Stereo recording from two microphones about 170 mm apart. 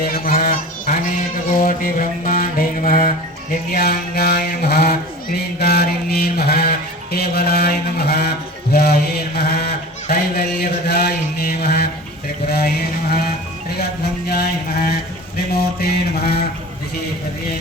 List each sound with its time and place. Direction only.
0.0 s goose: 60° left (ahead or behind)
1.6 s mantra: 55° left (ahead or behind)
3.7 s mantra: 65° left (ahead or behind)
8.7 s chant: 70° left (ahead or behind)
12.5 s a sound: 65° left (ahead or behind)
15.8 s mantra: 65° left (ahead or behind)